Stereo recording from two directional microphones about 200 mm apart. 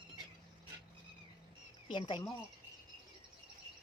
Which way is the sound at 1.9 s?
25° left (ahead or behind).